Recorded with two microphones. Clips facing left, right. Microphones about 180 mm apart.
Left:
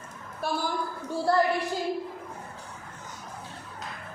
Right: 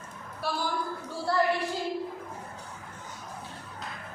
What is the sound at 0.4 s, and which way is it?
A woman's voice, 50° left (ahead or behind).